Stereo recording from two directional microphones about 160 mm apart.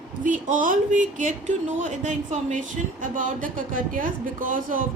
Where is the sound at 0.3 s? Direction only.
55° right (ahead or behind).